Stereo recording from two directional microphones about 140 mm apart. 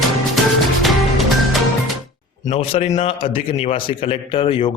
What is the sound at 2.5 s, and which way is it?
A man's voice, 50° left (ahead or behind).